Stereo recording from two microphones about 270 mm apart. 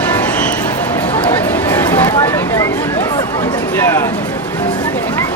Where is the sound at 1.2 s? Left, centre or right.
Centre.